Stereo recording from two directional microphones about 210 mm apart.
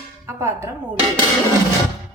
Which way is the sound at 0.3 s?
15° right (ahead or behind).